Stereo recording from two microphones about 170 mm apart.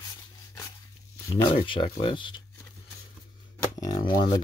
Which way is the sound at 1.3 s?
30° left (ahead or behind).